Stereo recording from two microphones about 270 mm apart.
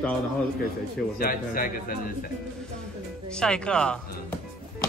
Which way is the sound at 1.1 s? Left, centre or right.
Left.